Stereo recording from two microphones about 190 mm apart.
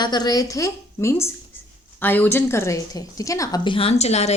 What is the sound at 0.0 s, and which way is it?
A woman's voice, 20° left (ahead or behind).